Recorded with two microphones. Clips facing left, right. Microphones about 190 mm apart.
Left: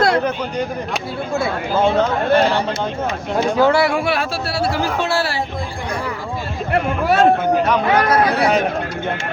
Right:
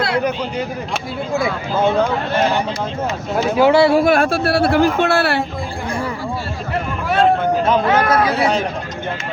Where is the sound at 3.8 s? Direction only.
35° right (ahead or behind); by 5.4 s 60° right (ahead or behind).